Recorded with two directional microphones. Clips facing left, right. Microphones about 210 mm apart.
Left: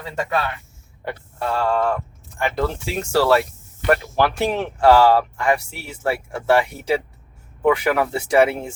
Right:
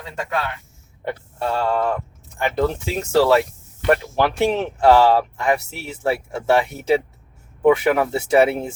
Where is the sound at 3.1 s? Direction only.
20° right (ahead or behind).